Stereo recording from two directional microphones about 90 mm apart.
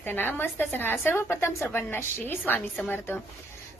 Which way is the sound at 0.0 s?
25° left (ahead or behind).